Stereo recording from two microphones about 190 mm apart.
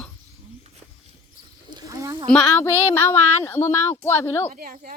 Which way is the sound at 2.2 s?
5° left (ahead or behind).